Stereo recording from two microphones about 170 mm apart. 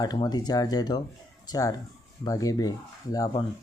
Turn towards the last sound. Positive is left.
turn(degrees=20)  # may be behind; listen again after turning